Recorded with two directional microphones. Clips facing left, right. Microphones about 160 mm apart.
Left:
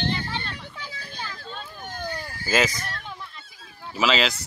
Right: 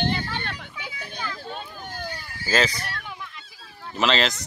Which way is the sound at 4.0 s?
5° left (ahead or behind).